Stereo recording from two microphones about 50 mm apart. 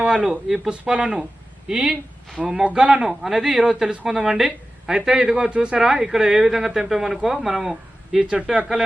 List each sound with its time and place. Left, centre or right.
0.0 s speech: centre
0.7 s speech: centre
5.8 s speech: centre